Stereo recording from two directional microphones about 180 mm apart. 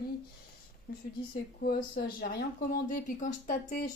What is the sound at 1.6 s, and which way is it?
Speech, 60° left (ahead or behind).